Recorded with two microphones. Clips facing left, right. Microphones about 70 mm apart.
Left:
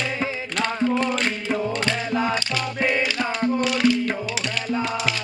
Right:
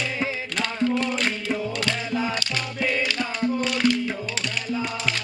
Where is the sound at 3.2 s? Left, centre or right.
Left.